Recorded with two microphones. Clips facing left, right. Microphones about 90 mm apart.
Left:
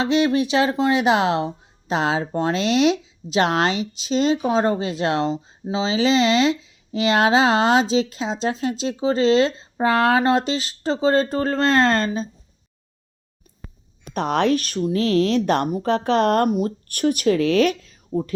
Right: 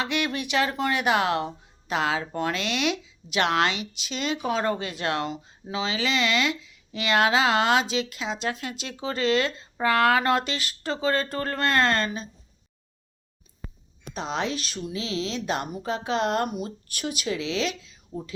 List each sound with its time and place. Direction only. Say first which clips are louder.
0.0 s speech: left 9 dB; 25° left (ahead or behind)
14.1 s speech: left 9 dB; 60° left (ahead or behind)